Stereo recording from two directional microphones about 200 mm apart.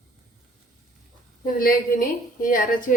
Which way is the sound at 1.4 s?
45° left (ahead or behind).